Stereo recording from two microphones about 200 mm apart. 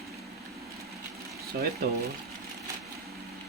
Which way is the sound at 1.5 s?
55° right (ahead or behind).